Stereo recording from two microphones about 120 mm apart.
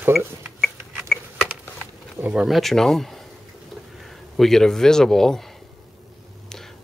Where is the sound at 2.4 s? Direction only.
Centre (ahead or behind).